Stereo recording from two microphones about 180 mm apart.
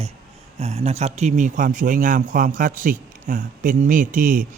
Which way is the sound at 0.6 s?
35° right (ahead or behind).